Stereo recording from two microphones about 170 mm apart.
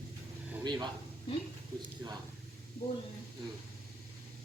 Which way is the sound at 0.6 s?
25° right (ahead or behind).